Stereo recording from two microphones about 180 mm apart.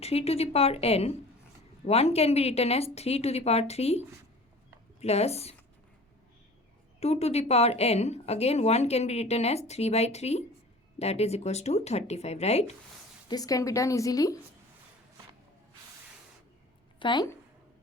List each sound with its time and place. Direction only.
0.0 s a woman's voice: 35° left (ahead or behind)
7.0 s a woman's voice: 35° left (ahead or behind)
13.2 s a woman's voice: 20° left (ahead or behind)
17.0 s speech: 25° left (ahead or behind)